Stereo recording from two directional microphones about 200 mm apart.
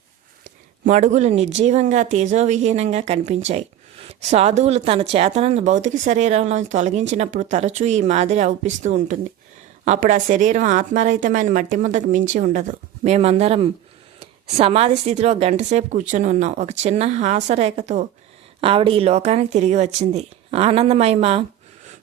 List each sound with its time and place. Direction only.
0.9 s a woman's voice: 35° right (ahead or behind)